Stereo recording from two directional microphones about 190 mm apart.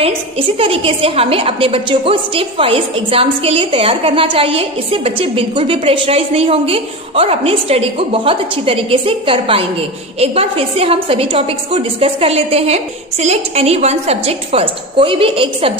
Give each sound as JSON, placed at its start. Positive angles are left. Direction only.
{"t": 0.0, "sound": "a woman's voice", "side_deg": -30}